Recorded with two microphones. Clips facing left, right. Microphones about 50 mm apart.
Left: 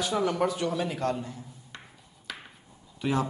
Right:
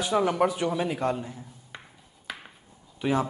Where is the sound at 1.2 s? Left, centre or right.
Centre.